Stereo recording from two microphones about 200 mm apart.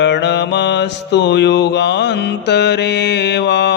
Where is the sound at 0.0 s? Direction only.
60° left (ahead or behind).